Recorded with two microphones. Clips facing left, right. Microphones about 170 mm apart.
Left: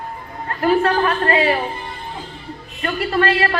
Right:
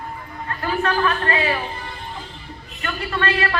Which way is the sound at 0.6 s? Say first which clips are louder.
Left 6 dB; 30° left (ahead or behind).